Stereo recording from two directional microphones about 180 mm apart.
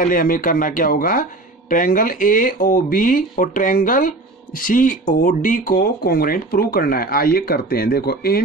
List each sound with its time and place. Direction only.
0.0 s speech: 50° left (ahead or behind)